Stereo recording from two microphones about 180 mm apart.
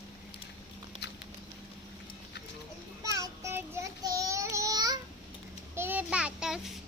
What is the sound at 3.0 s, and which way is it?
Child singing, 20° right (ahead or behind).